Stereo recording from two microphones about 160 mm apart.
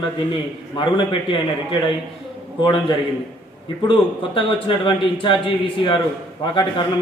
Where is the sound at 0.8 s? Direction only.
30° left (ahead or behind).